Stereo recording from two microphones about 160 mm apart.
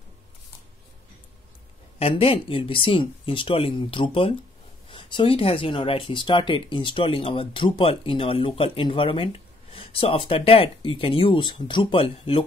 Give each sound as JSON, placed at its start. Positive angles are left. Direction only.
{"t": 2.0, "sound": "speech", "side_deg": 35}